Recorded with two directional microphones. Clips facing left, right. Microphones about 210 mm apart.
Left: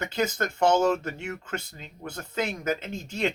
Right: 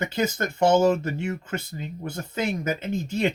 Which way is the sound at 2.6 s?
5° right (ahead or behind).